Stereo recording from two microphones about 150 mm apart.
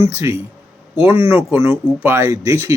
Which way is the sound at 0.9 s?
15° right (ahead or behind).